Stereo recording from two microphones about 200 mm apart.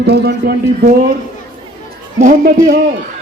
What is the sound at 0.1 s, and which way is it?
Speech, 55° right (ahead or behind).